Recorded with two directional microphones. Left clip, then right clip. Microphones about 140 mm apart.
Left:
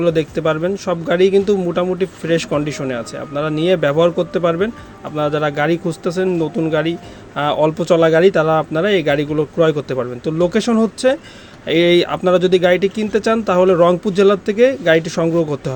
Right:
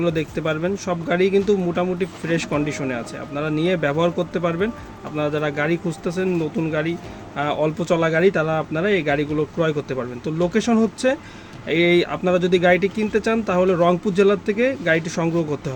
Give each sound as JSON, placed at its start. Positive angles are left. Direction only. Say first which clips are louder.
{"t": 0.0, "sound": "speech", "louder": "left 6 dB", "side_deg": 30}